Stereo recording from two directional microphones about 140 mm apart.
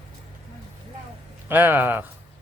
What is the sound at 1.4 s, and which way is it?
Speech, 15° right (ahead or behind).